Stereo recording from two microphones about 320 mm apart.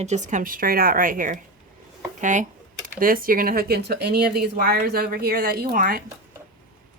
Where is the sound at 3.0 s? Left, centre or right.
Right.